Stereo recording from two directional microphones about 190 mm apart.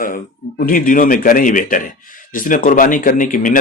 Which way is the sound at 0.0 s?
45° left (ahead or behind).